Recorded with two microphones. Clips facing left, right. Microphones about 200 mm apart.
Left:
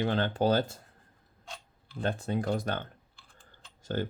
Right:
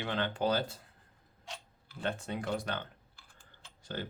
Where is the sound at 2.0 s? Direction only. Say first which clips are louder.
Left 5 dB; 35° left (ahead or behind).